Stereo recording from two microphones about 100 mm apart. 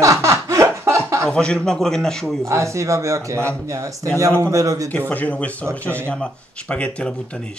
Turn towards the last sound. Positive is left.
turn(degrees=10)  # may be behind; listen again after turning